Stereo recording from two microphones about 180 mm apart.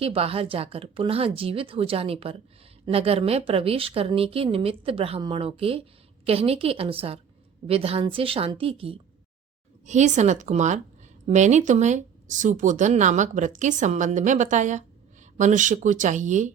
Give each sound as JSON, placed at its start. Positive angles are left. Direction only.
{"t": 0.0, "sound": "a woman's voice", "side_deg": -30}